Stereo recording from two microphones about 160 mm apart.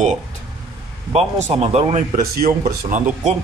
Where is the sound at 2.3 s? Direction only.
70° right (ahead or behind).